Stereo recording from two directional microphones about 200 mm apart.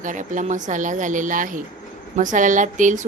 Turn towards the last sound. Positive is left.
turn(degrees=-40)  # may be behind; listen again after turning